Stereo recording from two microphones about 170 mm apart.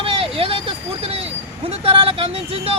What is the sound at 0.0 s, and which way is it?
Speech, 35° right (ahead or behind).